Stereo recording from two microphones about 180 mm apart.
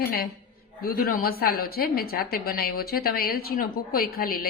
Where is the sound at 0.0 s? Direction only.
60° left (ahead or behind).